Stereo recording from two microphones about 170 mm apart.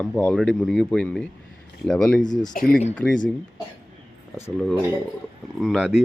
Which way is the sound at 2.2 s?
25° left (ahead or behind).